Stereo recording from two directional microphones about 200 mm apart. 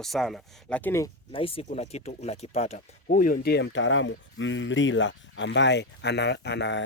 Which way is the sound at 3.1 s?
45° left (ahead or behind).